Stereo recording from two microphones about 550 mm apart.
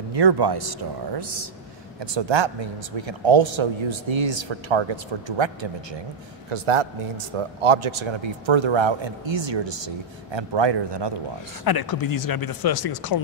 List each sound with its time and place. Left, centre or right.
0.1 s a man's voice: right
11.6 s speech: left